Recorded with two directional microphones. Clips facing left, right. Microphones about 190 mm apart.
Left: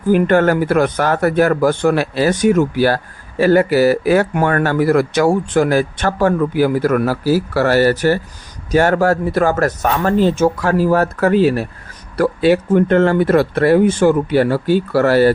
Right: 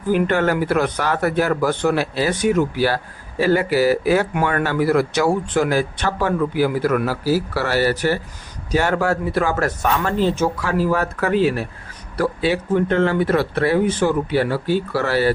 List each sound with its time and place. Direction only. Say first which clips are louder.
0.1 s speech: left 5 dB; 45° left (ahead or behind)
12.1 s speech: left 6 dB; 55° left (ahead or behind)